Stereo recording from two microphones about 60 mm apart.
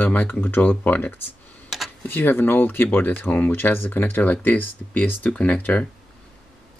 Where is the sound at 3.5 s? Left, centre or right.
Left.